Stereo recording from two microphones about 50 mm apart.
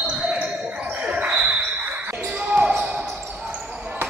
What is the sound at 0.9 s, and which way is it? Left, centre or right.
Basketball bounce, right.